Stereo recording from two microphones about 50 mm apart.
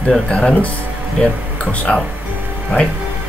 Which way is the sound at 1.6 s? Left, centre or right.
Left.